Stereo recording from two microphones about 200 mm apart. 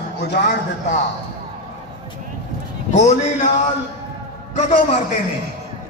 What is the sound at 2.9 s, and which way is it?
Speech, 35° left (ahead or behind).